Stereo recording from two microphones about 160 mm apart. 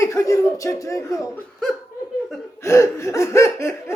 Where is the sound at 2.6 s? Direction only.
15° left (ahead or behind).